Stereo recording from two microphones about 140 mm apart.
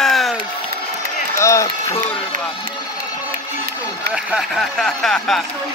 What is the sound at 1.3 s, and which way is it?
Speech, 20° left (ahead or behind).